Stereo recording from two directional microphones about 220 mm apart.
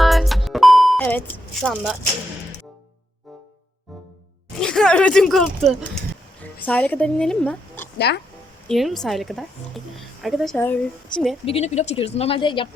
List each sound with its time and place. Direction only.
0.0 s music: centre (ahead or behind)
4.6 s speech: 5° left (ahead or behind)
7.9 s speech: 50° left (ahead or behind)
8.6 s speech: centre (ahead or behind)
11.4 s speech: 30° left (ahead or behind)